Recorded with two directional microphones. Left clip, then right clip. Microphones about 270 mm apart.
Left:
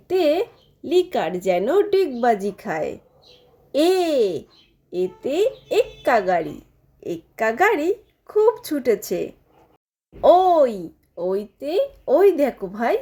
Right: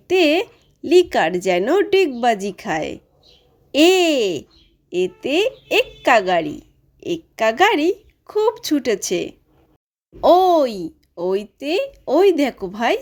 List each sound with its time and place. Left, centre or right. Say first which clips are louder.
0.1 s speech: right 3 dB; right
7.0 s a woman's voice: right 4 dB; right
8.3 s speech: even; right
9.0 s speech: right 3 dB; right
10.8 s speech: right 2 dB; right